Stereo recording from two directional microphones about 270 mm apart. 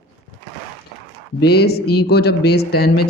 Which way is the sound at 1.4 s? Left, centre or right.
Left.